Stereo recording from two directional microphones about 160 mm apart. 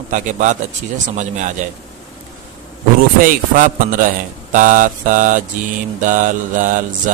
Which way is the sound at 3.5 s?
60° right (ahead or behind).